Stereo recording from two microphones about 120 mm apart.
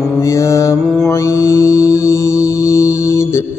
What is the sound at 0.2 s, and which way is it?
Mantra, 25° left (ahead or behind).